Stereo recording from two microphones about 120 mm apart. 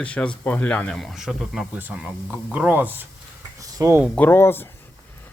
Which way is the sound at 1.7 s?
10° right (ahead or behind).